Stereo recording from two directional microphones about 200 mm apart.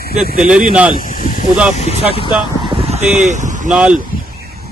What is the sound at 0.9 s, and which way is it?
Snake, 45° left (ahead or behind).